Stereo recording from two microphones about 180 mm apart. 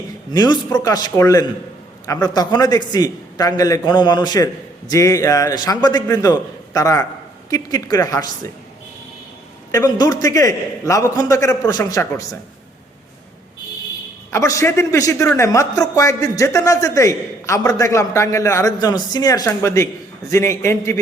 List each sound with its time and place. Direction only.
0.3 s a man's voice: 25° left (ahead or behind)
9.7 s a man's voice: 20° left (ahead or behind)
14.3 s speech: 15° left (ahead or behind)